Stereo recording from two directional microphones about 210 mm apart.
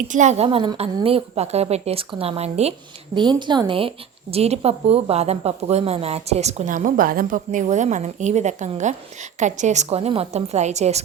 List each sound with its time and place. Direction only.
0.1 s a woman's voice: 35° right (ahead or behind)